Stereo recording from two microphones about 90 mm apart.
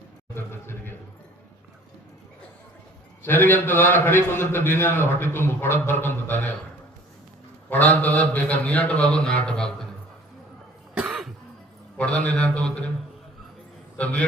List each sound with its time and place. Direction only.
0.3 s a sound: 25° left (ahead or behind)
3.2 s a man's voice: 20° left (ahead or behind)
7.7 s a man's voice: 15° left (ahead or behind)
11.0 s cough: centre (ahead or behind)
11.9 s a man's voice: 15° left (ahead or behind)
14.0 s a man's voice: 15° left (ahead or behind)